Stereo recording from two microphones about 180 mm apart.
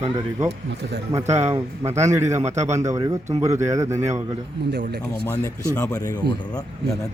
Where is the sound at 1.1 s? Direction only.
15° right (ahead or behind).